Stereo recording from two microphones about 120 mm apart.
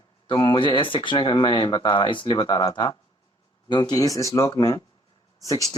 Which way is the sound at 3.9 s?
30° left (ahead or behind).